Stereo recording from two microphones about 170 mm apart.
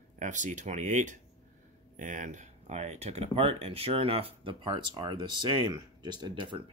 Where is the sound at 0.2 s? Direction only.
45° right (ahead or behind).